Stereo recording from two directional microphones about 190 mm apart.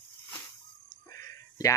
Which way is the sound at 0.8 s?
15° left (ahead or behind).